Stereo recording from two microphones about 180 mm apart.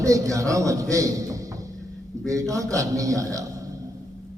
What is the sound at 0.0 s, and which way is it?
A man's voice, 20° right (ahead or behind).